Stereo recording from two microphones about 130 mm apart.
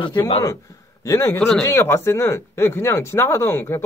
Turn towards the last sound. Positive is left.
turn(degrees=20)  # may be behind; listen again after turning